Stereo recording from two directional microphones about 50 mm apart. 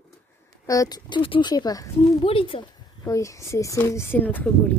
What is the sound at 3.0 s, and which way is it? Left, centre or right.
Speech, left.